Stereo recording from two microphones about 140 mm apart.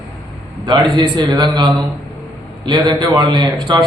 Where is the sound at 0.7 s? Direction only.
35° right (ahead or behind).